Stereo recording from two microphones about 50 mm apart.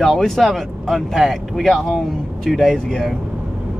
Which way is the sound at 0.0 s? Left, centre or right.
Centre.